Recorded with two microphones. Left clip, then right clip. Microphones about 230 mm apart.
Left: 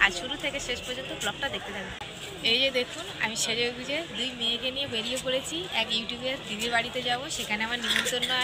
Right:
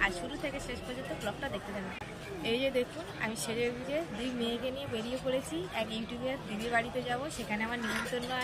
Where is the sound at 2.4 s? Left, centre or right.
Centre.